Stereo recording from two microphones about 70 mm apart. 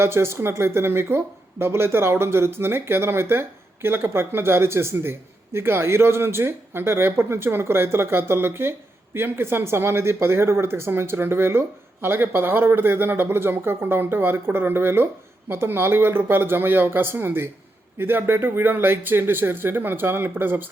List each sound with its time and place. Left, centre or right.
0.0 s speech: right